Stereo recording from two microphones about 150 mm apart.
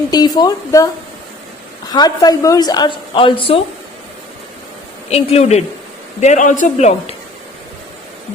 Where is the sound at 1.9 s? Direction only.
25° left (ahead or behind).